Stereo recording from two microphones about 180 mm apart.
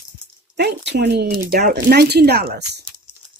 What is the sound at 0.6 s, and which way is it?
Speech, 65° right (ahead or behind).